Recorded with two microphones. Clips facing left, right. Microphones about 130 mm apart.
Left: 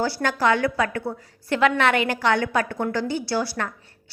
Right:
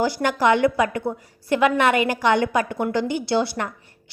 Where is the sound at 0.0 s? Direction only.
15° right (ahead or behind).